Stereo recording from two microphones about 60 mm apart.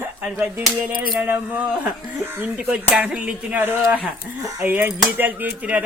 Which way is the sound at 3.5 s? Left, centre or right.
Right.